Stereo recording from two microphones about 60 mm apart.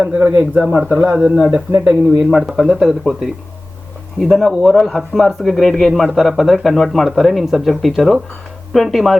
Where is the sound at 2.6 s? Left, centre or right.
Centre.